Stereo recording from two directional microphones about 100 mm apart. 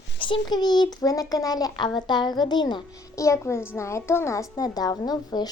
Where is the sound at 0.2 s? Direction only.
50° left (ahead or behind).